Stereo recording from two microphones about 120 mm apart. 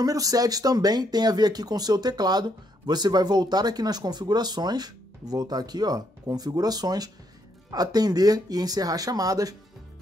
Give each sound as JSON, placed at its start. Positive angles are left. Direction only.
{"t": 0.0, "sound": "speech", "side_deg": -30}